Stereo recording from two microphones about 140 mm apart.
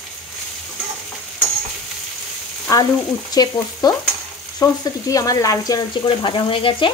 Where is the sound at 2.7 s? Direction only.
25° left (ahead or behind).